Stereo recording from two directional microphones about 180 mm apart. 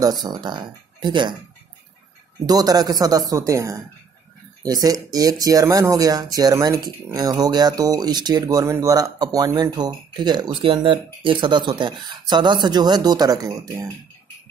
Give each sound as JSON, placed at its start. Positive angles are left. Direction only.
{"t": 0.2, "sound": "speech", "side_deg": -25}
{"t": 2.4, "sound": "speech", "side_deg": -20}